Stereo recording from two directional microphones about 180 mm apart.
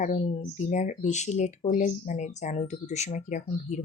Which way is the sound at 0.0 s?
40° left (ahead or behind).